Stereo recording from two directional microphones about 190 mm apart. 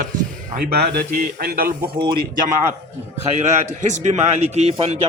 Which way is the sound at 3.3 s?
35° right (ahead or behind).